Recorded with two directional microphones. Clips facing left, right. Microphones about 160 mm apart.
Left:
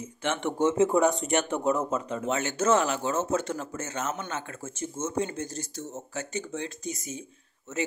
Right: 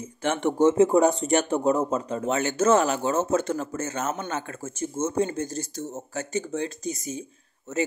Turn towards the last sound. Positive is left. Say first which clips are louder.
# right 4 dB
turn(degrees=-35)  # may be behind; listen again after turning